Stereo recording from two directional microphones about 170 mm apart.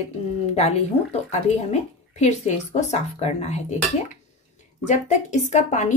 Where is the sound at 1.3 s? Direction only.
40° left (ahead or behind).